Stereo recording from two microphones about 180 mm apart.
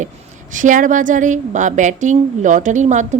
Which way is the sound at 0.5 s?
45° right (ahead or behind).